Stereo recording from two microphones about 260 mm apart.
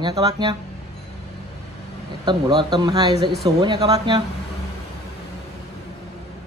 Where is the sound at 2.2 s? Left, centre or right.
Centre.